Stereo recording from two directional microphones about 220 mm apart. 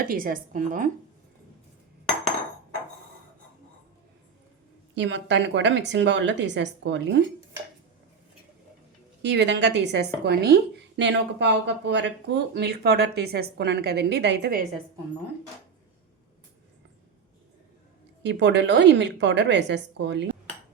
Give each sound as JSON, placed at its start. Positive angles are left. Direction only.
{"t": 0.0, "sound": "a woman's voice", "side_deg": -40}
{"t": 4.9, "sound": "a woman's voice", "side_deg": -55}
{"t": 9.2, "sound": "a woman's voice", "side_deg": -50}
{"t": 18.2, "sound": "a woman's voice", "side_deg": -50}